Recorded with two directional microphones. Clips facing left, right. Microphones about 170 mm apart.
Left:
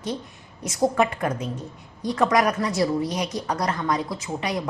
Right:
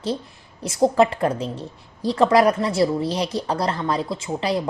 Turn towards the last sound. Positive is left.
turn(degrees=-30)  # may be behind; listen again after turning